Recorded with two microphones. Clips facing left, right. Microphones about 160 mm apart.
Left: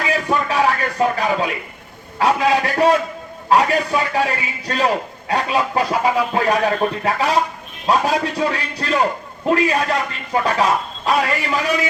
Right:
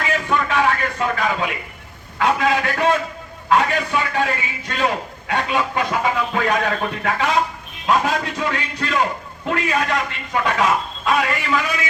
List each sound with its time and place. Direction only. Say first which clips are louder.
0.3 s music: even; 35° left (ahead or behind)
2.1 s a man's voice: left 2 dB; 35° left (ahead or behind)